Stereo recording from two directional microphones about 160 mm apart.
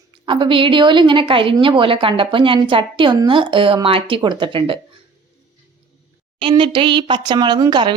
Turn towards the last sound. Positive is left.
turn(degrees=-25)  # may be behind; listen again after turning